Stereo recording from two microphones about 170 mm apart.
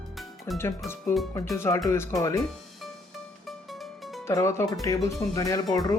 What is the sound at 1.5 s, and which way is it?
Speech, 15° left (ahead or behind).